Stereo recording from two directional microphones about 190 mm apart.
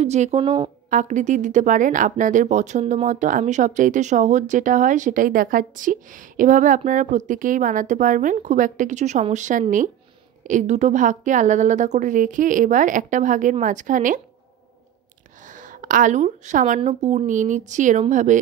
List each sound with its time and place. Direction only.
0.0 s a woman's voice: 35° right (ahead or behind)
15.4 s a woman's voice: 45° right (ahead or behind)